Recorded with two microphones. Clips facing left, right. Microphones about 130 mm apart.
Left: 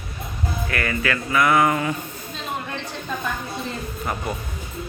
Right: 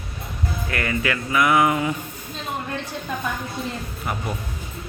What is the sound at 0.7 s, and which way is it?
A woman's voice, 20° right (ahead or behind).